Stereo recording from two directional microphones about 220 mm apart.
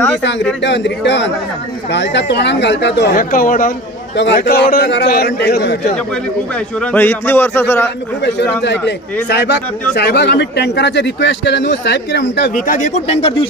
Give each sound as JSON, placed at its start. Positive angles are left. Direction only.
{"t": 0.6, "sound": "a man's voice", "side_deg": 55}
{"t": 6.8, "sound": "a man's voice", "side_deg": 5}
{"t": 8.2, "sound": "a man's voice", "side_deg": 50}